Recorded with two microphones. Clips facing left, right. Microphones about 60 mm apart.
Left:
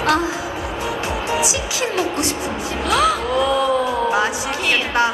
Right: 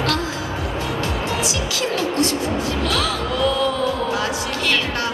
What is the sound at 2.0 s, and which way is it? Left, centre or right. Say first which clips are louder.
A woman's voice: right 2 dB; centre.